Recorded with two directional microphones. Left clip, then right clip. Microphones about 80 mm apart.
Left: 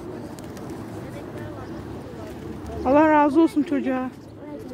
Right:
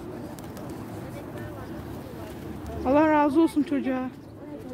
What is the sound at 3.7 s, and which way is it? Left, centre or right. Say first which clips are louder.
Speech: left 3 dB; right.